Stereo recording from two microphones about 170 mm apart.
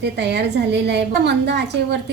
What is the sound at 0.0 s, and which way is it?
A woman's voice, 80° right.